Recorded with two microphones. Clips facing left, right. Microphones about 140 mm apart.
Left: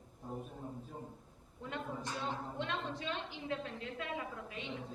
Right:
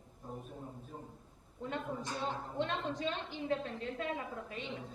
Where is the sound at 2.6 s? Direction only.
40° right (ahead or behind).